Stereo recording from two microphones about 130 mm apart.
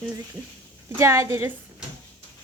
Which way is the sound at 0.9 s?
20° right (ahead or behind).